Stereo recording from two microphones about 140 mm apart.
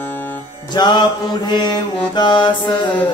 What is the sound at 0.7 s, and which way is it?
Mantra, 30° left (ahead or behind).